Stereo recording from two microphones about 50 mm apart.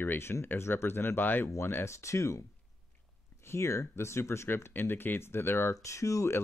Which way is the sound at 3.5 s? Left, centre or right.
Left.